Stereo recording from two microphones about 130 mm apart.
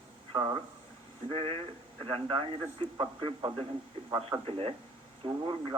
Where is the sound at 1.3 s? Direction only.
45° right (ahead or behind).